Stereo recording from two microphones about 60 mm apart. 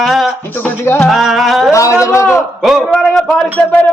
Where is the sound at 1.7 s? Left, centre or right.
Left.